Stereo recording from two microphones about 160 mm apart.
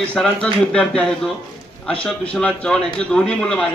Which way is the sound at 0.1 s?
5° left (ahead or behind).